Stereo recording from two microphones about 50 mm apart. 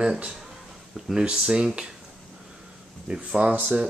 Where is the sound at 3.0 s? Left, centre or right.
Right.